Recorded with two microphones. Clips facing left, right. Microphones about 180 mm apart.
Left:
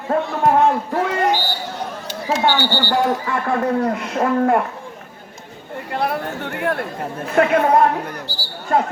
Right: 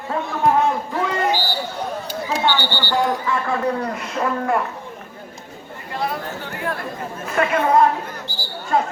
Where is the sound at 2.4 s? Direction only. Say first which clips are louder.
Left 4 dB; 45° left (ahead or behind).